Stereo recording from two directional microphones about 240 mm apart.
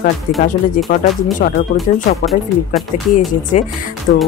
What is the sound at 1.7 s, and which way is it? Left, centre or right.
Speech, left.